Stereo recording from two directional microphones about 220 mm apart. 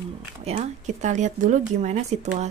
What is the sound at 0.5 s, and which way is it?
Speech, 30° right (ahead or behind).